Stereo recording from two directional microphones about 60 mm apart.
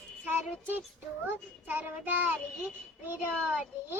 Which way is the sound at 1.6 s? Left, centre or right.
Right.